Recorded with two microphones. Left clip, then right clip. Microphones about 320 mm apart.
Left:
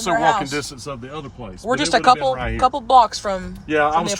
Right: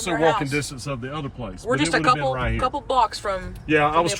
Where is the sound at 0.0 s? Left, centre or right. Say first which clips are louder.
Left 3 dB; centre.